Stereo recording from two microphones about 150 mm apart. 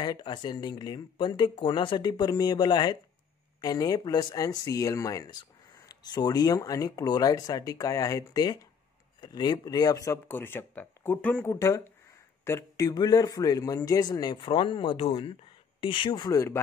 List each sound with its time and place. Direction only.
0.0 s speech: 30° left (ahead or behind)